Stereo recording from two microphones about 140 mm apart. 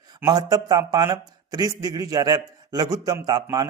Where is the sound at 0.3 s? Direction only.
25° right (ahead or behind).